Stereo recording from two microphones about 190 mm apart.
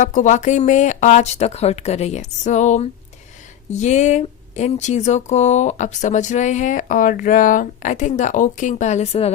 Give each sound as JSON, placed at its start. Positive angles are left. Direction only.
{"t": 0.0, "sound": "speech", "side_deg": 40}